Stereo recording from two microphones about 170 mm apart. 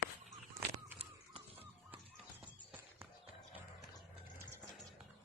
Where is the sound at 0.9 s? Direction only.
35° right (ahead or behind).